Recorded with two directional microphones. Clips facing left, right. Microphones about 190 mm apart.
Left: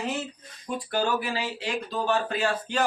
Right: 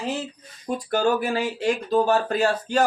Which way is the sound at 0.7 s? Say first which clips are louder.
Right 5 dB; 45° right (ahead or behind).